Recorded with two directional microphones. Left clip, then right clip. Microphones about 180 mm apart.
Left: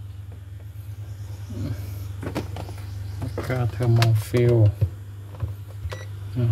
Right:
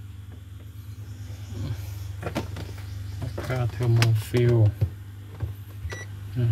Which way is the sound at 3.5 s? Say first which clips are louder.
Left 3 dB; 10° left (ahead or behind).